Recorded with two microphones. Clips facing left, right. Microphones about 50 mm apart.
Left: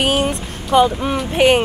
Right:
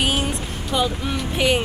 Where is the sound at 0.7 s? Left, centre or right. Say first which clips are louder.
Left 9 dB; left.